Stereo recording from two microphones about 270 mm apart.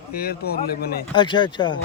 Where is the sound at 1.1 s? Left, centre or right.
Centre.